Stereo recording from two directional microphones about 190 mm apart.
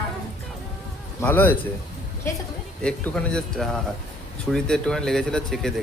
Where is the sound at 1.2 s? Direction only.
10° left (ahead or behind).